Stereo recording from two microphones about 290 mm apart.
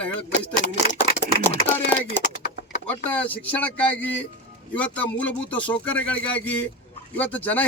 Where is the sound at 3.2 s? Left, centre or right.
Centre.